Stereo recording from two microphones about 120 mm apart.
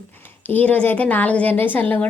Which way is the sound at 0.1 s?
15° left (ahead or behind).